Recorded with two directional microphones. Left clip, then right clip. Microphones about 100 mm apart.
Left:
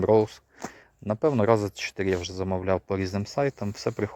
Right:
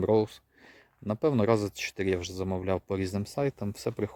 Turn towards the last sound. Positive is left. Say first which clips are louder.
# left 4 dB
turn(degrees=-5)  # may be behind; listen again after turning